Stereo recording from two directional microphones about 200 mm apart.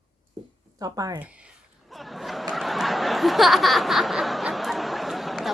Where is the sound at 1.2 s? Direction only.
5° right (ahead or behind).